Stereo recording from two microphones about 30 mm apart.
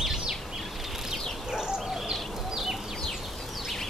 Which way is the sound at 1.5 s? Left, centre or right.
Centre.